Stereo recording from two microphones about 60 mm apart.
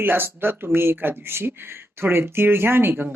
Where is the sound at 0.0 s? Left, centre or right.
Right.